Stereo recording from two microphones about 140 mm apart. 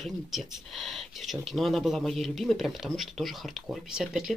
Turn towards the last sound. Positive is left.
turn(degrees=0)  # may be behind; listen again after turning